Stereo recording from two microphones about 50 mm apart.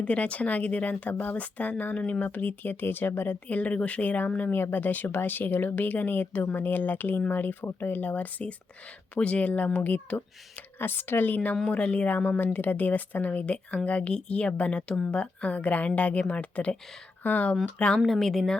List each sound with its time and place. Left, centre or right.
0.0 s speech: left
3.5 s speech: left
4.5 s speech: left
10.8 s speech: left
11.7 s speech: left
17.7 s speech: centre
18.0 s a woman's voice: centre